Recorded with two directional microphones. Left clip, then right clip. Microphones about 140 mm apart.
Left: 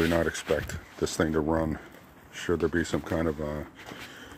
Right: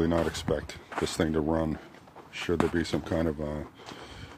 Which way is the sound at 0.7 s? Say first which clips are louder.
Even; 50° right (ahead or behind).